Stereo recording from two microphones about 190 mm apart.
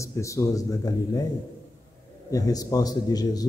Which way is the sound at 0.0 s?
15° left (ahead or behind).